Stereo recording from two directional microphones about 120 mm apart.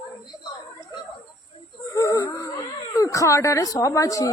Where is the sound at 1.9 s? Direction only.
25° left (ahead or behind).